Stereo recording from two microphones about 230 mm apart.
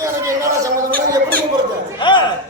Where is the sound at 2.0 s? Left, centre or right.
Left.